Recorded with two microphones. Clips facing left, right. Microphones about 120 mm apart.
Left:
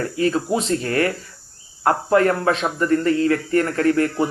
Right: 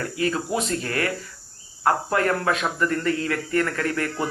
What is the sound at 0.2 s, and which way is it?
Speech, 30° left (ahead or behind).